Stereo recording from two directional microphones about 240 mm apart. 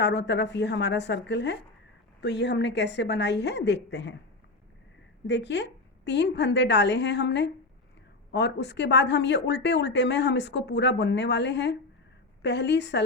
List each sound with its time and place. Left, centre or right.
0.0 s speech: left
5.2 s speech: left